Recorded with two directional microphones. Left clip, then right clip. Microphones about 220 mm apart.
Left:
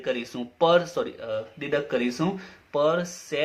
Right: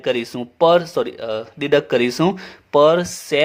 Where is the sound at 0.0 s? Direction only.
40° right (ahead or behind).